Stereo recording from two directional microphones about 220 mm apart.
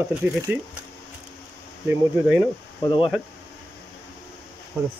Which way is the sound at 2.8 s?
20° left (ahead or behind).